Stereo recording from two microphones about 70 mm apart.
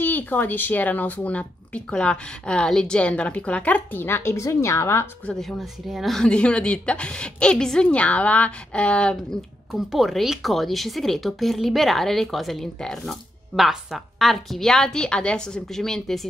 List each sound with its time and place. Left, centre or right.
0.0 s speech: left
5.3 s speech: centre
6.1 s a woman's voice: centre